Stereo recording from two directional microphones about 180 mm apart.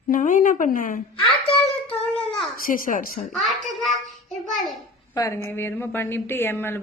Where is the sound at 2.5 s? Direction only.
50° left (ahead or behind).